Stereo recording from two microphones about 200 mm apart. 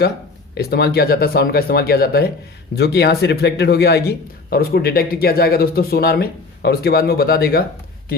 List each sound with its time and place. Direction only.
0.5 s a man's voice: 55° left (ahead or behind)